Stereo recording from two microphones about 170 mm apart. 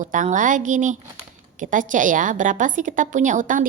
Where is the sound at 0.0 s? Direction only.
50° right (ahead or behind).